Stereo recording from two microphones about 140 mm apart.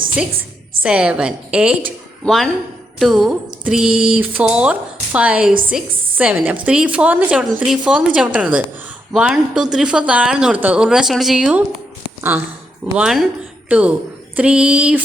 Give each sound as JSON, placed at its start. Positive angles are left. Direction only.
{"t": 0.8, "sound": "a woman's voice", "side_deg": -10}
{"t": 13.0, "sound": "a woman's voice", "side_deg": -5}